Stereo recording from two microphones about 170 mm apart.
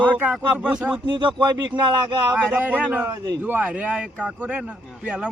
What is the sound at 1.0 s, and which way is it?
Speech, 25° right (ahead or behind).